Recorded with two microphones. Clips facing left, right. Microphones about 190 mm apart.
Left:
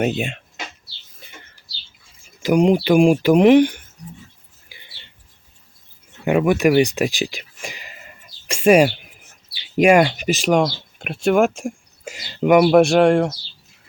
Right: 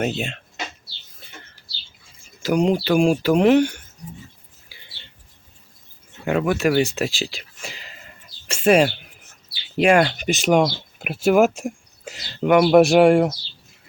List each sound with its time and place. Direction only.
0.0 s speech: 15° left (ahead or behind)
2.4 s speech: 15° left (ahead or behind)
6.2 s speech: 15° left (ahead or behind); by 11.7 s 5° right (ahead or behind)
12.0 s speech: 10° left (ahead or behind)